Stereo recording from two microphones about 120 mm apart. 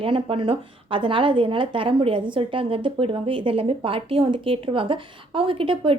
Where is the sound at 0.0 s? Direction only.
45° right (ahead or behind).